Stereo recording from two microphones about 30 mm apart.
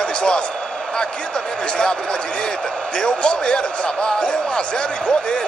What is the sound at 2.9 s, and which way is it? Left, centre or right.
A man's voice, left.